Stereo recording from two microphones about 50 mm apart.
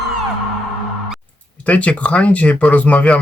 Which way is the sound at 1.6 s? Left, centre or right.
Left.